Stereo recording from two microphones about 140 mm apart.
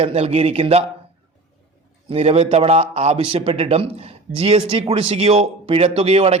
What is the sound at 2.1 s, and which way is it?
A man's voice, 45° right (ahead or behind).